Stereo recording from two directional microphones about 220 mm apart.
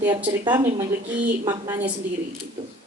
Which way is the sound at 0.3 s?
20° right (ahead or behind).